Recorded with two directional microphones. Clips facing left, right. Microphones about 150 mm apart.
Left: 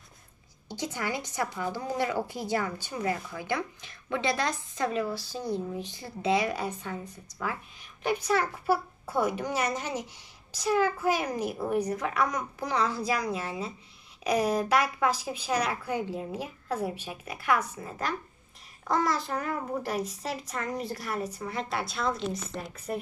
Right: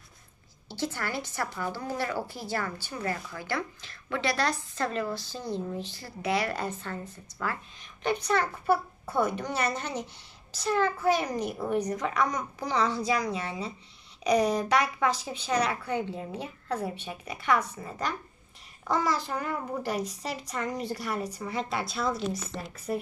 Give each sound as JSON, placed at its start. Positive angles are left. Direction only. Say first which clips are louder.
{"t": 0.7, "sound": "a woman's voice", "louder": "even", "side_deg": 15}
{"t": 6.5, "sound": "a woman's voice", "louder": "even", "side_deg": 10}